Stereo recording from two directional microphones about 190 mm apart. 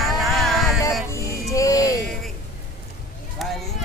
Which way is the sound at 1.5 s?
15° left (ahead or behind).